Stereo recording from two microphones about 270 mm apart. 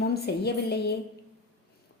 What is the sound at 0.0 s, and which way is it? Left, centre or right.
Speech, left.